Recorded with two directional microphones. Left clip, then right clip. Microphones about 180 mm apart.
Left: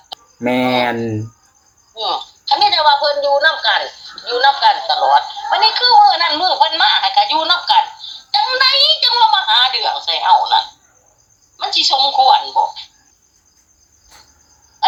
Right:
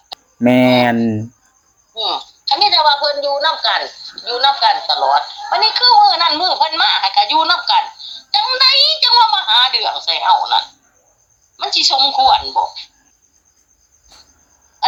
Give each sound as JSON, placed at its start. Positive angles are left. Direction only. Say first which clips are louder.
{"t": 0.3, "sound": "speech", "louder": "right 4 dB", "side_deg": -45}
{"t": 1.9, "sound": "a woman's voice", "louder": "even", "side_deg": -20}